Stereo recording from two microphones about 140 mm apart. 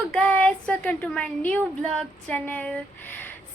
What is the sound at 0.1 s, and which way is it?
A woman's voice, 10° left (ahead or behind).